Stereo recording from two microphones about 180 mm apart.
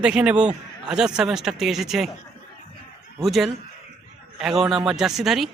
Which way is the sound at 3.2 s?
Centre (ahead or behind).